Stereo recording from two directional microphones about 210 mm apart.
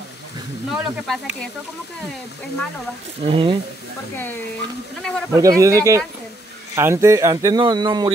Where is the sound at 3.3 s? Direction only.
25° right (ahead or behind).